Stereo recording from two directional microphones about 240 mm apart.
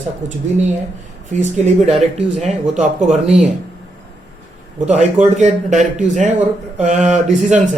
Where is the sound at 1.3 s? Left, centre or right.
Right.